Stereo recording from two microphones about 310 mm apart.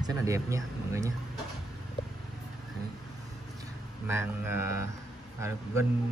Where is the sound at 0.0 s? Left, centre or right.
Centre.